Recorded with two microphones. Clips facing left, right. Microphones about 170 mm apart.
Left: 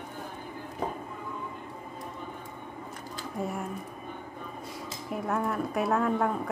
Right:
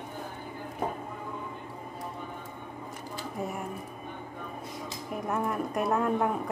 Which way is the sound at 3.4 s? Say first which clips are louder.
Left 2 dB; 5° right (ahead or behind).